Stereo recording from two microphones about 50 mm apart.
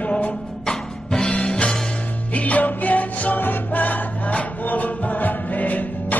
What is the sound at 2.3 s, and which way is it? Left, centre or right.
Music, left.